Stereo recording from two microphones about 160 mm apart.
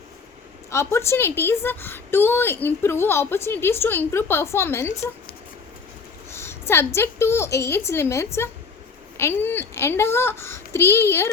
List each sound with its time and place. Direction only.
0.7 s a woman's voice: 15° left (ahead or behind)
6.3 s a woman's voice: 15° left (ahead or behind)